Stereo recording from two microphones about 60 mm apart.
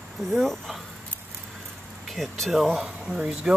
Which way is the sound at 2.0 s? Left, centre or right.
Centre.